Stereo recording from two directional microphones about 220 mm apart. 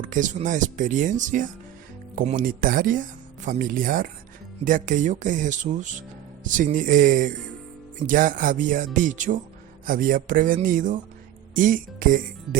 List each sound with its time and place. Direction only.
0.0 s speech: 35° right (ahead or behind)